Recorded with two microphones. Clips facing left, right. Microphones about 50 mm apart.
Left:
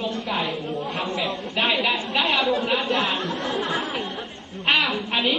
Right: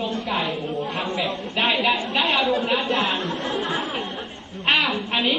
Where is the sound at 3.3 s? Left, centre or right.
Right.